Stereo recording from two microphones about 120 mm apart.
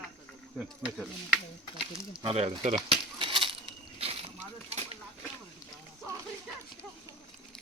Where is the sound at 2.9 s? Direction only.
50° right (ahead or behind).